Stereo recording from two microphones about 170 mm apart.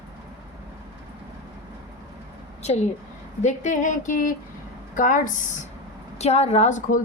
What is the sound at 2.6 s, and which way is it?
A woman's voice, 40° left (ahead or behind).